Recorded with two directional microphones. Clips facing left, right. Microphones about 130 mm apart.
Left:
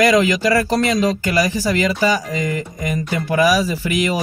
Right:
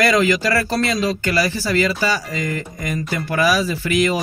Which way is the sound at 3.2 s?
10° left (ahead or behind).